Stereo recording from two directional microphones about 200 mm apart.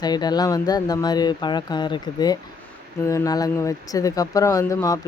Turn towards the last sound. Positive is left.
turn(degrees=15)  # may be behind; listen again after turning